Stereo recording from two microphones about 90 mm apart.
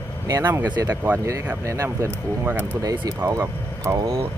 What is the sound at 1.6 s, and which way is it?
Speech, 35° right (ahead or behind).